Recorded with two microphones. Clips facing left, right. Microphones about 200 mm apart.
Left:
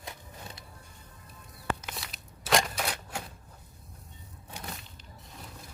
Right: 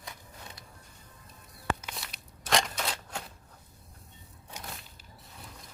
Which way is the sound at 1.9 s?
Centre (ahead or behind).